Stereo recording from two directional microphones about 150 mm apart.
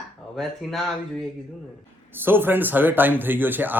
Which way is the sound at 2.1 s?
15° right (ahead or behind).